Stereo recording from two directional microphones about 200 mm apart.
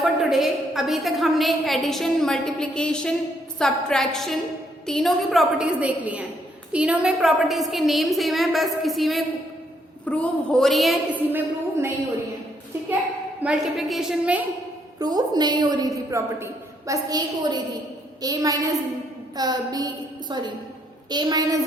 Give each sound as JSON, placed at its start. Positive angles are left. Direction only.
{"t": 0.0, "sound": "a woman's voice", "side_deg": 0}
{"t": 13.4, "sound": "a woman's voice", "side_deg": -5}
{"t": 14.9, "sound": "a woman's voice", "side_deg": -20}